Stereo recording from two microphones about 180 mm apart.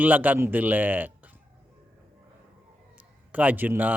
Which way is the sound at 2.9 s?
10° right (ahead or behind).